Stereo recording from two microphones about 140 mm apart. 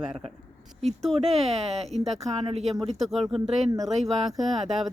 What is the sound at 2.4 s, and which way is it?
Speech, 45° right (ahead or behind).